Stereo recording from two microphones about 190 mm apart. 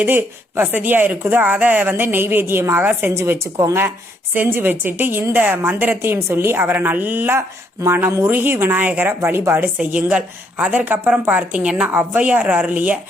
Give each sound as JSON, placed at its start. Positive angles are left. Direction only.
{"t": 0.0, "sound": "a woman's voice", "side_deg": -10}